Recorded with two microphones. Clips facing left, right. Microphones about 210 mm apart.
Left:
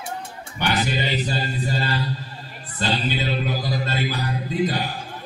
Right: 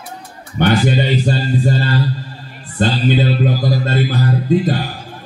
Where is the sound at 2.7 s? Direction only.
50° right (ahead or behind).